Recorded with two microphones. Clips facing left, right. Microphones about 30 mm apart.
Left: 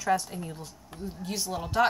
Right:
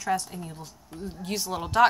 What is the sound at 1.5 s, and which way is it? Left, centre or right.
Speech, right.